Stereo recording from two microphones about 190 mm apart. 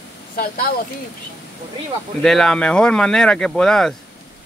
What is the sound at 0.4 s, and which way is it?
Speech, 50° left (ahead or behind).